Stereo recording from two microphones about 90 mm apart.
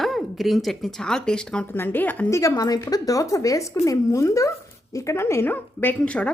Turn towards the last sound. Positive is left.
turn(degrees=15)  # may be behind; listen again after turning